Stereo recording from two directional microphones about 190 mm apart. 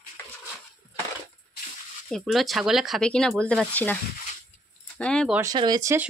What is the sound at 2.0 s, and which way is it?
Speech, centre (ahead or behind).